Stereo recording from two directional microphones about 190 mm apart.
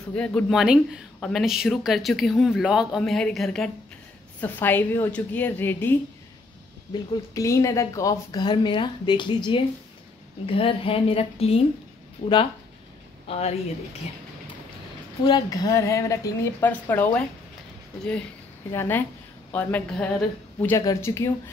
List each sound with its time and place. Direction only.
0.1 s a woman's voice: 5° left (ahead or behind); by 11.6 s 30° left (ahead or behind)
13.3 s a woman's voice: 35° left (ahead or behind)
15.2 s a woman's voice: 20° left (ahead or behind)